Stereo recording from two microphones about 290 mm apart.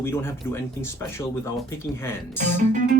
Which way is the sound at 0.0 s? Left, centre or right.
Centre.